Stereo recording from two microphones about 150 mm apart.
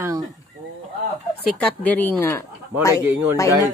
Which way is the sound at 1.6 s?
10° left (ahead or behind).